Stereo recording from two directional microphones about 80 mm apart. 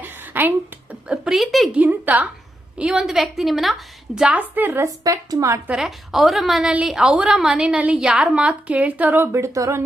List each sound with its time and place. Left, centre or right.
0.0 s a sound: right
1.0 s speech: centre
1.7 s a woman's voice: centre
2.7 s a woman's voice: centre
4.4 s a woman's voice: right
5.0 s speech: right
5.7 s a woman's voice: centre; by 9.8 s right